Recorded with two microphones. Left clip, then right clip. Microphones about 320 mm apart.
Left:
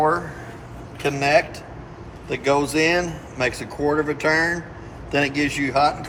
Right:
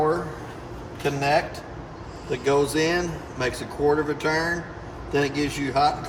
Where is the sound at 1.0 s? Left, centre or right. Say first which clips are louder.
Left 4 dB; centre.